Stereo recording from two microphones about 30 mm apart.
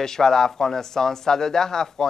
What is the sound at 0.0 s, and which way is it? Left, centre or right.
Speech, centre.